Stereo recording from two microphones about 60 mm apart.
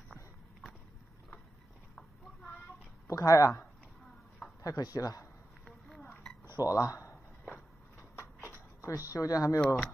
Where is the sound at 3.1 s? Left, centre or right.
Left.